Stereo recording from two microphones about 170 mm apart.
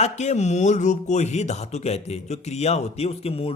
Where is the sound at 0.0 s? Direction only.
40° left (ahead or behind).